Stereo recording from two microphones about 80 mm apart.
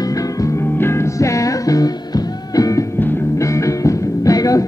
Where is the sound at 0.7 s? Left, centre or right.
Left.